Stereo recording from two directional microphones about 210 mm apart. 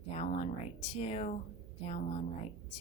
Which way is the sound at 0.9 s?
30° left (ahead or behind).